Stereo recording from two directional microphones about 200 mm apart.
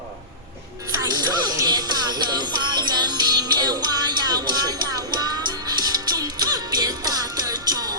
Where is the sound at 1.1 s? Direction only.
20° right (ahead or behind).